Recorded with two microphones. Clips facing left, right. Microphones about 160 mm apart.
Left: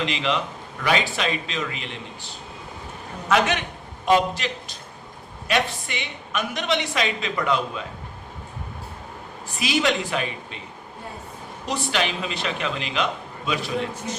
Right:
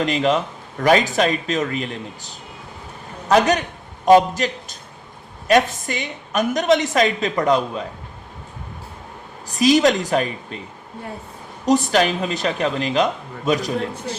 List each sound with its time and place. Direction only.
0.0 s a woman's voice: 45° right (ahead or behind)
9.5 s a woman's voice: 40° right (ahead or behind)
11.6 s a woman's voice: 45° right (ahead or behind)